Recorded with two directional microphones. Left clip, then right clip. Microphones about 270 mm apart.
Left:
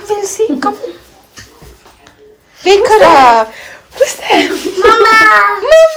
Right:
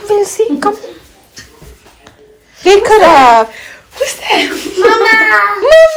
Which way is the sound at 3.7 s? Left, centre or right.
Left.